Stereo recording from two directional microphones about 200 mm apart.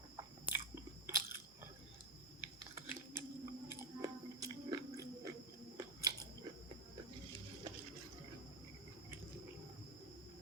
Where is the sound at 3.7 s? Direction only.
15° right (ahead or behind).